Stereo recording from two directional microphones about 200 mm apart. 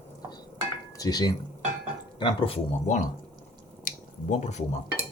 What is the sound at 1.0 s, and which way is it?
Speech, 20° left (ahead or behind).